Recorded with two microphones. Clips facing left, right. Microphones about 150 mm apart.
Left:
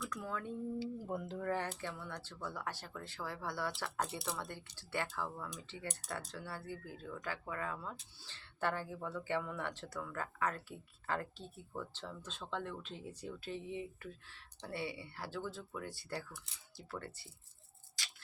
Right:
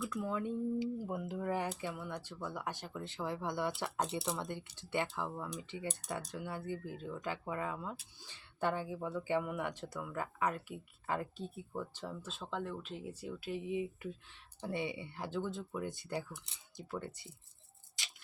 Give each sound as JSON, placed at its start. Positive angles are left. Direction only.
{"t": 0.2, "sound": "speech", "side_deg": -20}
{"t": 18.0, "sound": "tick-tock", "side_deg": -20}